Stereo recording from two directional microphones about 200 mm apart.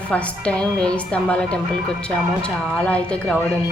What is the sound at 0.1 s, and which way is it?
A woman's voice, 5° left (ahead or behind).